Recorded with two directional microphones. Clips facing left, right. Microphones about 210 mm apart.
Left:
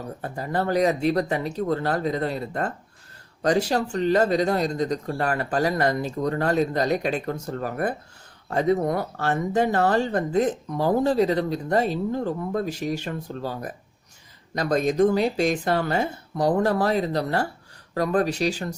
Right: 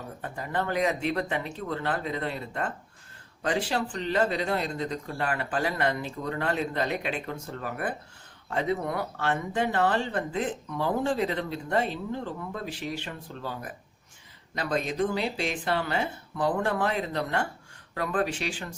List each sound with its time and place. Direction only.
0.2 s speech: 35° left (ahead or behind)